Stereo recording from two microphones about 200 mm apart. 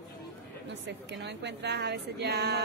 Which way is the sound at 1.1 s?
60° right (ahead or behind).